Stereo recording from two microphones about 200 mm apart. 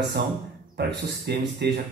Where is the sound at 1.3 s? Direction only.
55° right (ahead or behind).